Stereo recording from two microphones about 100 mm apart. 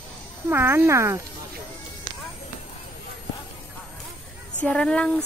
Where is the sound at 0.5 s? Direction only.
25° right (ahead or behind).